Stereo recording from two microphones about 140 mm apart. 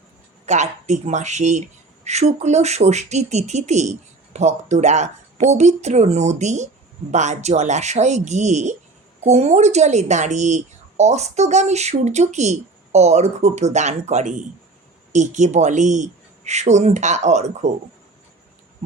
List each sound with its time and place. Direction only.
0.4 s speech: 55° right (ahead or behind)